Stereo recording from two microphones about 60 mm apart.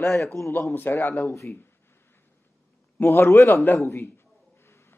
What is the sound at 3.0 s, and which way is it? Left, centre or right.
A man's voice, left.